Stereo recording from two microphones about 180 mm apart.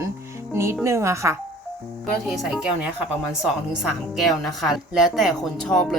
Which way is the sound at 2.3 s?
Centre (ahead or behind).